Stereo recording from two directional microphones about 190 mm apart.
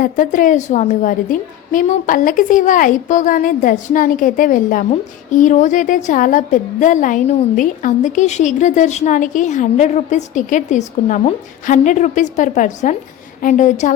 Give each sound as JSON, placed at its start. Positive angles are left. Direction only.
{"t": 0.0, "sound": "a woman's voice", "side_deg": 45}